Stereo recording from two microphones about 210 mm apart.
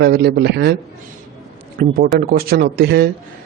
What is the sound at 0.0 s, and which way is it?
Speech, 50° right (ahead or behind).